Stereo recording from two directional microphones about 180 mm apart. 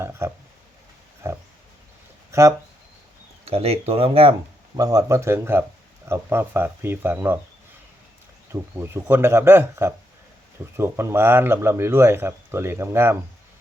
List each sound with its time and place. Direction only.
0.0 s speech: 15° right (ahead or behind)
3.4 s speech: 35° right (ahead or behind)
4.8 s speech: 20° right (ahead or behind)
8.5 s speech: 15° right (ahead or behind)